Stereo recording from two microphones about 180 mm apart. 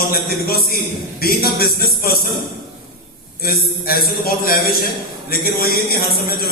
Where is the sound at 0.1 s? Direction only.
60° left (ahead or behind).